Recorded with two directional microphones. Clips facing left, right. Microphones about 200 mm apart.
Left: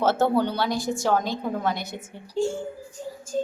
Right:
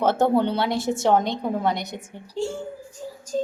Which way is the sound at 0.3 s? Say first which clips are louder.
Right 2 dB; 25° right (ahead or behind).